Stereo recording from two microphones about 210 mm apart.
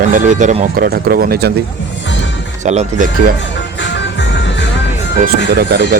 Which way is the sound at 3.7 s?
60° left (ahead or behind).